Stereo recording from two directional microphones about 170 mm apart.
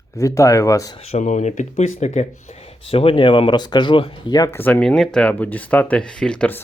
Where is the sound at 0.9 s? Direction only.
40° left (ahead or behind).